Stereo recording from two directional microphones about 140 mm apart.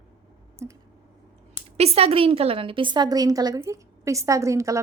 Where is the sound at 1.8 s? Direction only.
45° right (ahead or behind).